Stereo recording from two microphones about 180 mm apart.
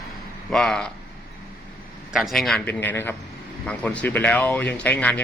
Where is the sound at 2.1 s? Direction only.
Centre (ahead or behind).